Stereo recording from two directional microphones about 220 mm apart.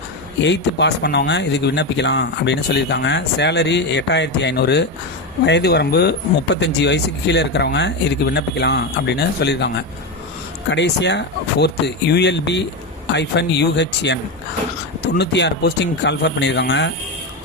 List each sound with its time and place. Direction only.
0.4 s speech: 50° left (ahead or behind)
15.2 s speech: 50° left (ahead or behind)